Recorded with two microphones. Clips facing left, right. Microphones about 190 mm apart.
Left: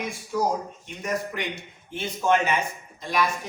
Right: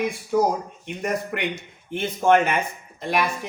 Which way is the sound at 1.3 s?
60° right (ahead or behind).